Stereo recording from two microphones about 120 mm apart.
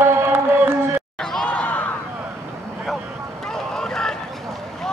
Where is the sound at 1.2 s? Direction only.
5° left (ahead or behind).